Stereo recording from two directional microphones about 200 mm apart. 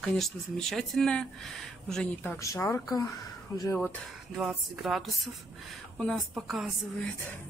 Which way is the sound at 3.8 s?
5° left (ahead or behind).